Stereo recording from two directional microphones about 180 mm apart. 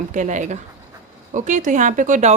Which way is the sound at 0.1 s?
40° right (ahead or behind).